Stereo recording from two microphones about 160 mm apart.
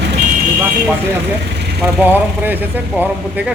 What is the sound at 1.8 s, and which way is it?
A man's voice, 10° right (ahead or behind).